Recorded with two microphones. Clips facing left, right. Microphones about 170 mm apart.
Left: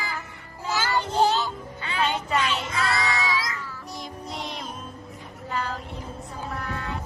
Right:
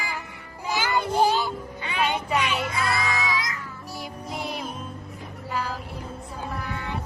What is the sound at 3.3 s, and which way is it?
Child singing, 30° left (ahead or behind).